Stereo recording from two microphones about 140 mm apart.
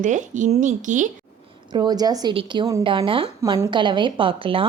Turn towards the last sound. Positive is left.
turn(degrees=-40)  # may be behind; listen again after turning